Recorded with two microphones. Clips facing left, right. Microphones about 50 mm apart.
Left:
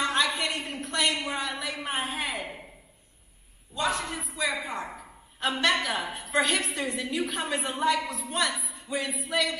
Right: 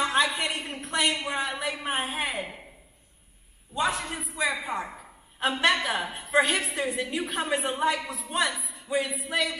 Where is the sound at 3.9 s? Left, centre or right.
Centre.